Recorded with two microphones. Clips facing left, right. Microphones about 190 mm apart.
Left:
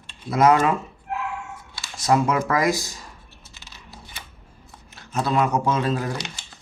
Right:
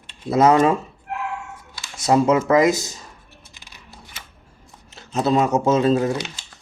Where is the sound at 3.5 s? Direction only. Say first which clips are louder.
Left 3 dB; 15° right (ahead or behind).